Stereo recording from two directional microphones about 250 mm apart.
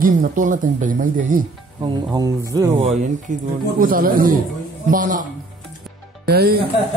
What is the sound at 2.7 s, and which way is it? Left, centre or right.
A man's voice, right.